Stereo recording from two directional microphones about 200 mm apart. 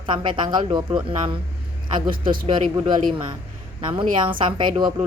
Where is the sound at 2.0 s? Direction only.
25° right (ahead or behind).